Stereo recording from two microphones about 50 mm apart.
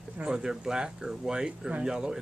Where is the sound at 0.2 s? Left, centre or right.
Centre.